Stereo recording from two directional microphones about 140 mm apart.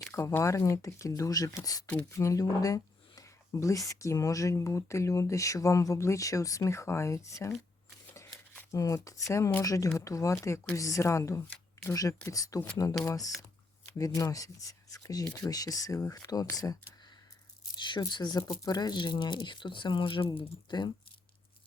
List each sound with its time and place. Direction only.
0.1 s speech: 20° left (ahead or behind)
8.7 s speech: 25° left (ahead or behind)
17.7 s speech: 35° left (ahead or behind)